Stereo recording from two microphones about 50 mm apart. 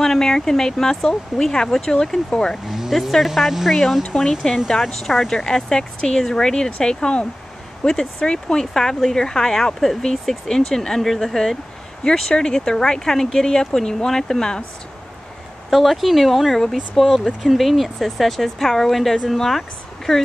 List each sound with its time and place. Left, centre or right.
0.0 s speech: centre
2.7 s speech: centre
4.0 s speech: centre
15.7 s speech: centre